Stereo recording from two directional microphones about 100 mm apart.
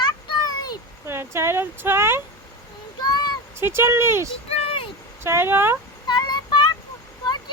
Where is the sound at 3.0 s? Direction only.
45° left (ahead or behind).